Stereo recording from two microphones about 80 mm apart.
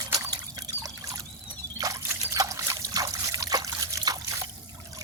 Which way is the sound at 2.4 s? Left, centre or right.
Right.